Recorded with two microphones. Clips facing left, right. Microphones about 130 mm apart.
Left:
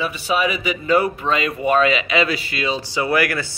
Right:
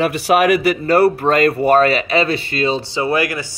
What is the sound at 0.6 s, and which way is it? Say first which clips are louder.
Speech: right 5 dB; 40° right (ahead or behind).